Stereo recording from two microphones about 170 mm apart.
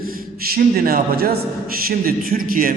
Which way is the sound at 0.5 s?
60° right (ahead or behind).